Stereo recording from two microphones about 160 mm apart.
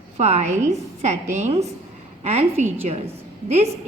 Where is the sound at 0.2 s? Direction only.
45° right (ahead or behind).